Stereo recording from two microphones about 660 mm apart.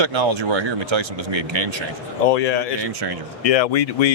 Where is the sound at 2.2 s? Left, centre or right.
Left.